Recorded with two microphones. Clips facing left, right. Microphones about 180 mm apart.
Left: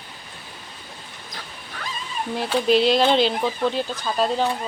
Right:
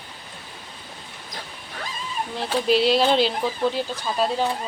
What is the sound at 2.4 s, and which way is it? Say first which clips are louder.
Speech: left 2 dB; 5° right (ahead or behind).